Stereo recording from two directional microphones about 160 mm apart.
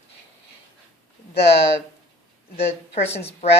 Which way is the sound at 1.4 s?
40° left (ahead or behind).